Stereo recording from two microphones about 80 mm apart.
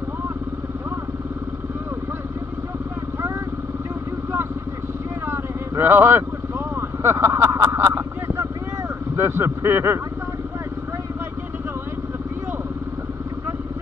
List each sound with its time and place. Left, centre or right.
5.2 s vehicle: right
7.5 s a sound: right
9.1 s speech: right